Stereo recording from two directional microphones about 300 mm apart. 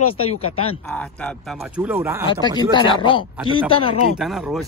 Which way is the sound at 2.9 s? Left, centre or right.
Centre.